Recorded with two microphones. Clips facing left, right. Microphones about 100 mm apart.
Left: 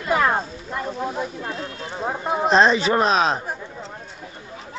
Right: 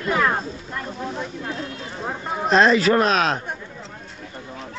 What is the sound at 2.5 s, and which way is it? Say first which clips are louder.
Speech: right 1 dB; 30° left (ahead or behind).